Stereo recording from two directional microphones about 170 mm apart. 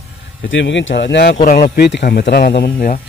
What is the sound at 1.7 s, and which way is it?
Speech, 75° left (ahead or behind).